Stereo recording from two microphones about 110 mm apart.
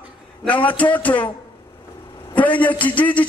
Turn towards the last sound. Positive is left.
turn(degrees=15)  # may be behind; listen again after turning